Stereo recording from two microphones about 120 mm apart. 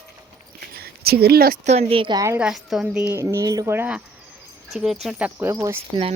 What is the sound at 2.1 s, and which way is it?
Speech, 25° right (ahead or behind).